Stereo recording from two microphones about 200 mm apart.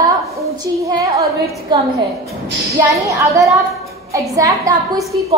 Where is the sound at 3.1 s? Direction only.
15° right (ahead or behind).